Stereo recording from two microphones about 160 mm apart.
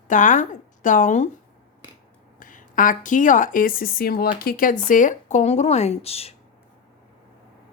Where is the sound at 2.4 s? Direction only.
55° left (ahead or behind); by 6.3 s 40° left (ahead or behind).